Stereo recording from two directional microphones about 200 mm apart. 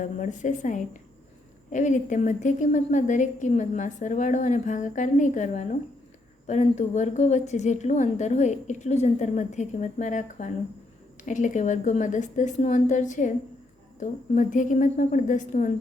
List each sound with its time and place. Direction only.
0.0 s a woman's voice: 40° left (ahead or behind)